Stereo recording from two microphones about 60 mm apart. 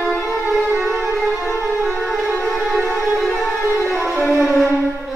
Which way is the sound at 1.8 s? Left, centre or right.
Centre.